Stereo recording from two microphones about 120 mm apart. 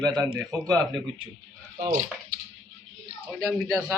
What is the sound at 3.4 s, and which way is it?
Speech, 25° right (ahead or behind).